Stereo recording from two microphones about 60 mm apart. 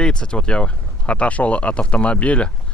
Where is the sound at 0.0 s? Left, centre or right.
Centre.